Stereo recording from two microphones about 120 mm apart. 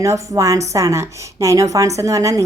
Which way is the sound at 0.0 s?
25° right (ahead or behind).